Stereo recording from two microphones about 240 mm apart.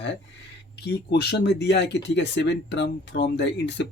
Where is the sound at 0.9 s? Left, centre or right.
Left.